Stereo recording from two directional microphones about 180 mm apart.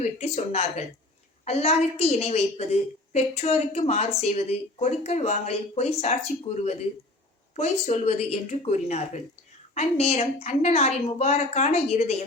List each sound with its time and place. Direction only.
0.0 s speech: 35° left (ahead or behind)